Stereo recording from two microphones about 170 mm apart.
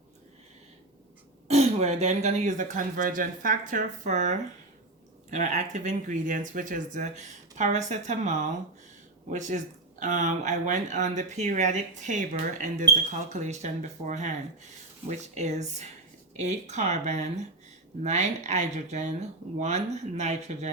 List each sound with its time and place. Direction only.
1.5 s speech: 40° right (ahead or behind)
15.4 s speech: 40° right (ahead or behind)